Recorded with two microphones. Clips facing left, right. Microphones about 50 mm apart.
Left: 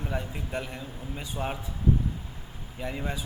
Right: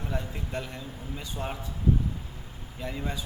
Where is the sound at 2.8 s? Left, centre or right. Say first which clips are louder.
Left 1 dB; centre.